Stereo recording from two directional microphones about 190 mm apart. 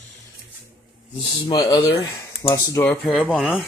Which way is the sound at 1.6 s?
20° left (ahead or behind).